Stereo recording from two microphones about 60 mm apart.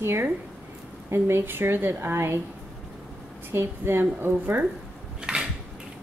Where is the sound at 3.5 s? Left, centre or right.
Right.